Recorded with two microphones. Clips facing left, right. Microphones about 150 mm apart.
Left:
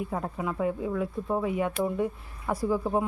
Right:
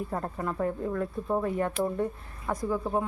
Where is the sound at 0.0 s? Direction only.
5° left (ahead or behind).